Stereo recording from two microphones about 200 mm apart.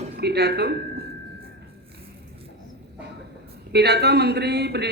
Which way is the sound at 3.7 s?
55° right (ahead or behind).